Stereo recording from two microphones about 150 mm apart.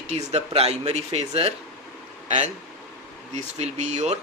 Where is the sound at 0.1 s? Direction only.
45° right (ahead or behind).